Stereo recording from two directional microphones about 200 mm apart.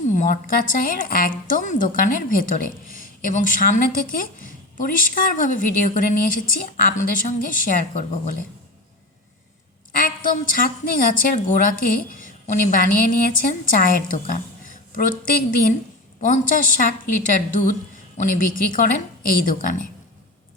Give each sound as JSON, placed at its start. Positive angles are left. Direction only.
{"t": 0.1, "sound": "a woman's voice", "side_deg": 40}
{"t": 9.9, "sound": "a woman's voice", "side_deg": 45}